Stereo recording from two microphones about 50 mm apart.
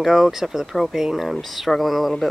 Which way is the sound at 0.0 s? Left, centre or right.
Centre.